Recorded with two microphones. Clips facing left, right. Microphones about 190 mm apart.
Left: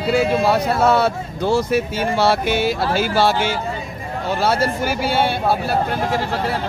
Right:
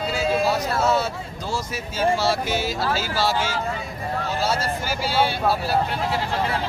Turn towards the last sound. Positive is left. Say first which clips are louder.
# left 3 dB
turn(degrees=50)  # may be behind; listen again after turning